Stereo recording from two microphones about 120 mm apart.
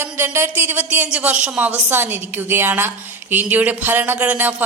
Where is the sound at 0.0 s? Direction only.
20° right (ahead or behind).